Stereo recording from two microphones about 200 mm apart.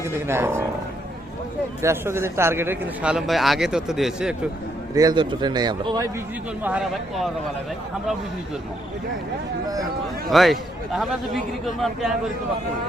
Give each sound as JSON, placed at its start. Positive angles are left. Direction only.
{"t": 0.0, "sound": "speech", "side_deg": -10}
{"t": 1.8, "sound": "a man's voice", "side_deg": -15}
{"t": 4.9, "sound": "speech", "side_deg": -20}
{"t": 6.6, "sound": "a man's voice", "side_deg": -5}
{"t": 10.2, "sound": "a man's voice", "side_deg": 0}